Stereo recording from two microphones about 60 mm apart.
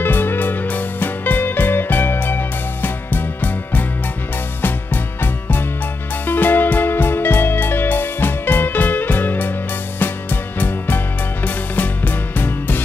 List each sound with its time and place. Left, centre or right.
0.0 s music: left